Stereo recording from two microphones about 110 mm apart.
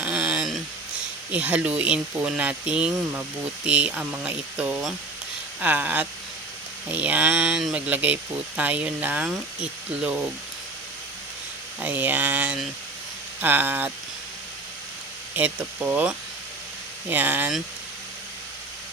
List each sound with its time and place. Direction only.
0.0 s a sound: 10° right (ahead or behind)
1.3 s speech: 10° right (ahead or behind)
11.8 s speech: 15° right (ahead or behind)
15.4 s speech: 10° right (ahead or behind)